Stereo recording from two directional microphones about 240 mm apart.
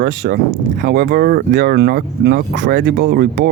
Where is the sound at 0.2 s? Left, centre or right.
Right.